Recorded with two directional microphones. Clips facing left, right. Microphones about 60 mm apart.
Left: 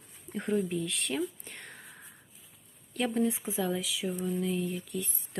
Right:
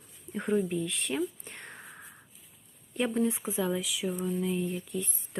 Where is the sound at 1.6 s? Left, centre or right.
Right.